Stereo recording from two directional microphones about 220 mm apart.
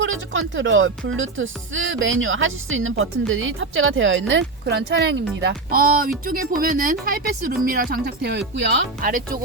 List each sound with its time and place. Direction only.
0.0 s speech: 60° right (ahead or behind); by 9.4 s 40° right (ahead or behind)